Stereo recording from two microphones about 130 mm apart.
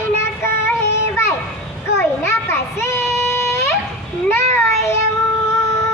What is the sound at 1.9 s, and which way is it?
Child singing, 20° left (ahead or behind).